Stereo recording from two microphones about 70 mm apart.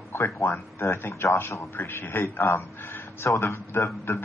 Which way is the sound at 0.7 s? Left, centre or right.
Left.